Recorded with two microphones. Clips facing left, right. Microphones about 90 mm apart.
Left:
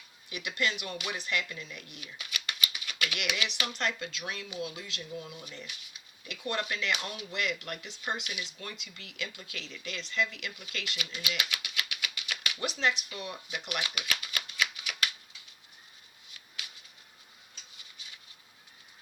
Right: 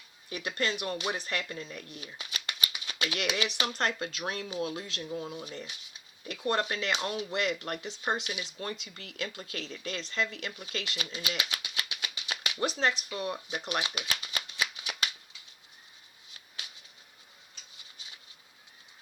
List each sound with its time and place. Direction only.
0.3 s speech: 35° right (ahead or behind)